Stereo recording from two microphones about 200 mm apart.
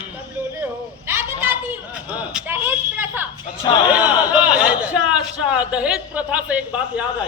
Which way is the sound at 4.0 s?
5° right (ahead or behind).